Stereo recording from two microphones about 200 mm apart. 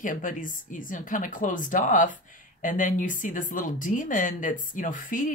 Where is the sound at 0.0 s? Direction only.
40° left (ahead or behind).